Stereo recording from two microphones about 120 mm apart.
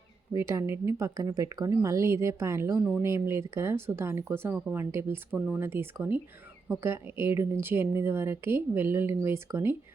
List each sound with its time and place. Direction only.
0.3 s a woman's voice: 25° right (ahead or behind)